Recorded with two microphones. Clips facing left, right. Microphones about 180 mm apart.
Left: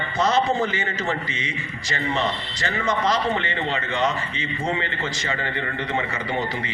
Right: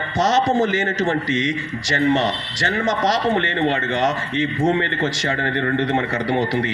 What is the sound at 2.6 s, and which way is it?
A man's voice, 50° right (ahead or behind).